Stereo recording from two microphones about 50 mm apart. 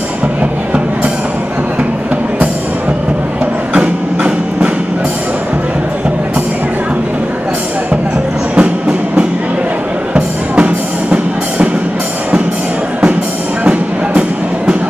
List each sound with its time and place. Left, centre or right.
0.4 s music: right
3.7 s a sound: right
8.5 s train: right
10.1 s music: right